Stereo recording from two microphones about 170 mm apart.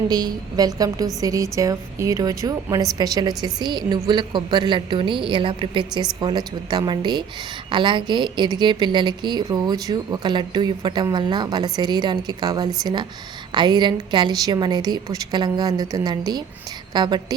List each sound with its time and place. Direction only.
0.1 s a woman's voice: 25° right (ahead or behind)